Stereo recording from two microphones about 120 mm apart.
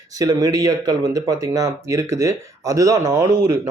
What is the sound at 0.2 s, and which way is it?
Speech, 30° right (ahead or behind).